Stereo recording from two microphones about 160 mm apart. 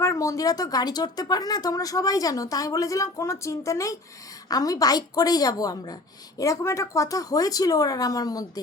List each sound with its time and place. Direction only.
0.0 s speech: 20° left (ahead or behind)